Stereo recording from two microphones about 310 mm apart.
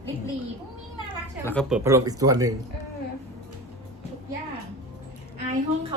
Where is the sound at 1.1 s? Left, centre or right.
Centre.